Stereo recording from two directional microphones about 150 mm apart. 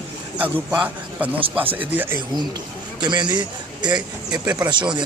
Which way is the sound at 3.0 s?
30° right (ahead or behind).